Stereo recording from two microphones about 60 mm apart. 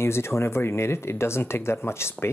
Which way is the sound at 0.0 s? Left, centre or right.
Left.